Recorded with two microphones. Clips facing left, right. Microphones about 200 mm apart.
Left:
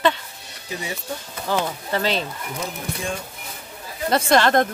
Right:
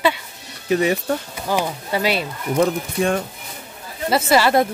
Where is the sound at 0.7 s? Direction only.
70° right (ahead or behind).